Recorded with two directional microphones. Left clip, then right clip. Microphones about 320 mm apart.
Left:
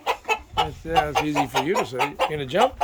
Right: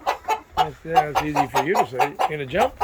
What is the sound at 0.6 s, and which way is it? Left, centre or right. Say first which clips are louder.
Speech: right 3 dB; centre.